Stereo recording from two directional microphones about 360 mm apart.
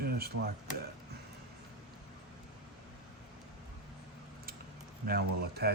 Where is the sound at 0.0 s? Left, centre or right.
Right.